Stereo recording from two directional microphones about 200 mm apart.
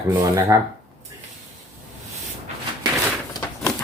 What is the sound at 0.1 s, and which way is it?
Speech, 15° right (ahead or behind).